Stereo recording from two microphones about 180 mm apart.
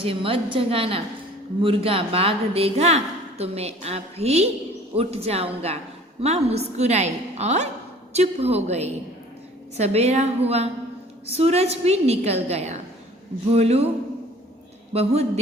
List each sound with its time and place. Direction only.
0.0 s a woman's voice: 30° right (ahead or behind)
14.9 s a woman's voice: 35° right (ahead or behind)